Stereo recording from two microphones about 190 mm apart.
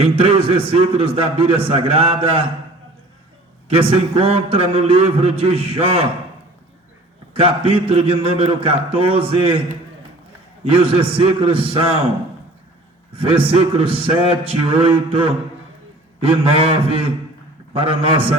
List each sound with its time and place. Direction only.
0.0 s a man's voice: 30° right (ahead or behind)
3.7 s a man's voice: 30° right (ahead or behind)
7.3 s a man's voice: 30° right (ahead or behind)
13.1 s a man's voice: 30° right (ahead or behind)